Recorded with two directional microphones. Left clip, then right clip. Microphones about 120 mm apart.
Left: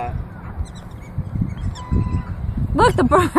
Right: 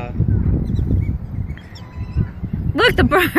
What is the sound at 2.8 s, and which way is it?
Speech, 10° left (ahead or behind).